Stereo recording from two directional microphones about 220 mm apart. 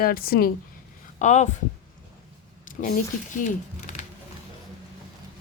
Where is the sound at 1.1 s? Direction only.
30° left (ahead or behind).